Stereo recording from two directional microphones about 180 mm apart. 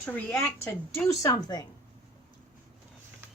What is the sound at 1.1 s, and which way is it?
Speech, 20° left (ahead or behind).